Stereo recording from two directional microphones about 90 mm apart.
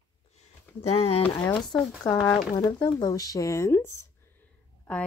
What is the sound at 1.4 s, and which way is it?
Speech, 55° left (ahead or behind).